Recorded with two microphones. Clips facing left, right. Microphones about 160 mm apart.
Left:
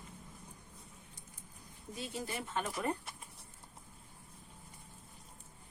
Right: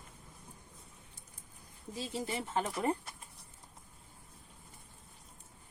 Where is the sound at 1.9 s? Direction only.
25° right (ahead or behind).